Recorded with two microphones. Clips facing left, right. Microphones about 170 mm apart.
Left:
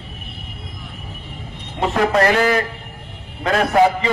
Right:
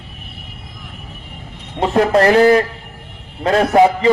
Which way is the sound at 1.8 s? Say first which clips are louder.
Right 4 dB; 35° right (ahead or behind).